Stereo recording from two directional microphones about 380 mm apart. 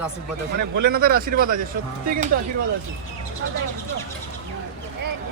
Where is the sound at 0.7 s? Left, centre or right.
Right.